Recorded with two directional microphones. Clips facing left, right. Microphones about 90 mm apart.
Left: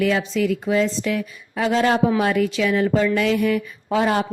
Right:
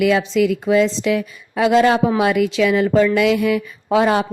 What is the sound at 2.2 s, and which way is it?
Speech, 85° right.